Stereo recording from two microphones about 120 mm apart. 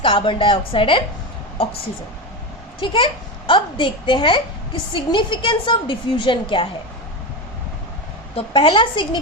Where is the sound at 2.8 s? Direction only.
45° left (ahead or behind).